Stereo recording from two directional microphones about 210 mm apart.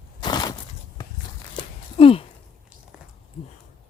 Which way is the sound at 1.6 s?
25° left (ahead or behind).